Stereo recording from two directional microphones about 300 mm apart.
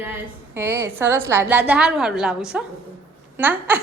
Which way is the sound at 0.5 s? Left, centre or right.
Centre.